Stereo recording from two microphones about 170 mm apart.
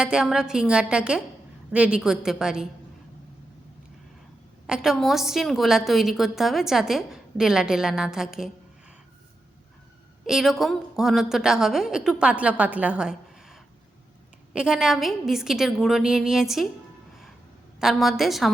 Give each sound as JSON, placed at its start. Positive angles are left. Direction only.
{"t": 0.0, "sound": "a woman's voice", "side_deg": -5}
{"t": 4.6, "sound": "a woman's voice", "side_deg": -5}
{"t": 10.2, "sound": "a woman's voice", "side_deg": 0}
{"t": 17.7, "sound": "a woman's voice", "side_deg": 0}